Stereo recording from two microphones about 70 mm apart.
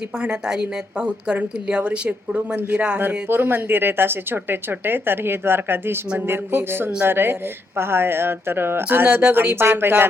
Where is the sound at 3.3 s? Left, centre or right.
Right.